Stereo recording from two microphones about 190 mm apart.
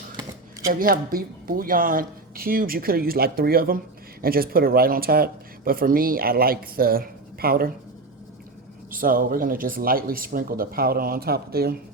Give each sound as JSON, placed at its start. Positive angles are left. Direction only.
{"t": 0.7, "sound": "speech", "side_deg": -50}
{"t": 8.9, "sound": "speech", "side_deg": -50}